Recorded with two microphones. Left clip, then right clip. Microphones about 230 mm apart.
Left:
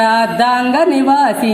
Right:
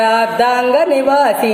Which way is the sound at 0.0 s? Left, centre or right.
Centre.